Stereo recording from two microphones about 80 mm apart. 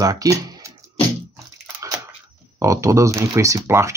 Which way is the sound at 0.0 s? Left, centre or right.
Right.